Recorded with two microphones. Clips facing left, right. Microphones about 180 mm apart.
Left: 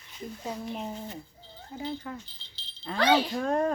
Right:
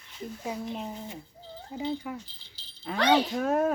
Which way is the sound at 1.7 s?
15° right (ahead or behind).